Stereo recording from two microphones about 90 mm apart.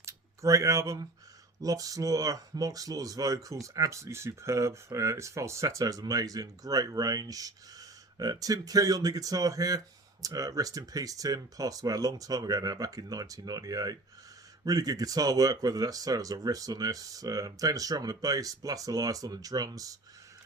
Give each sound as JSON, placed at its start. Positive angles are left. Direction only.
{"t": 0.0, "sound": "speech", "side_deg": -35}